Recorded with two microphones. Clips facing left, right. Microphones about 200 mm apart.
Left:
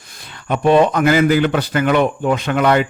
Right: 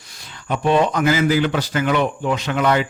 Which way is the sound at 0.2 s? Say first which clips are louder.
Left 4 dB; 60° left (ahead or behind).